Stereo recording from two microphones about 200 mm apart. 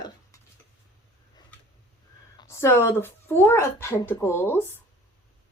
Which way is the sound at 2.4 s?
15° left (ahead or behind).